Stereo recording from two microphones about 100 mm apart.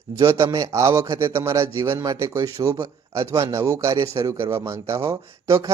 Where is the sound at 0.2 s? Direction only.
30° right (ahead or behind).